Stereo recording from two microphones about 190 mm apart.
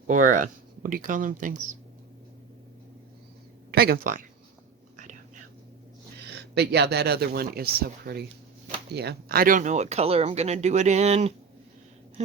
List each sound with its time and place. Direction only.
0.1 s speech: 40° right (ahead or behind)
3.7 s speech: 55° right (ahead or behind)
6.1 s speech: 60° right (ahead or behind); by 11.3 s 35° right (ahead or behind)